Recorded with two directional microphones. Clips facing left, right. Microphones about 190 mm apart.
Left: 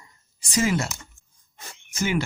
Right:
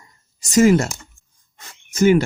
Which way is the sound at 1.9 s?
40° right (ahead or behind).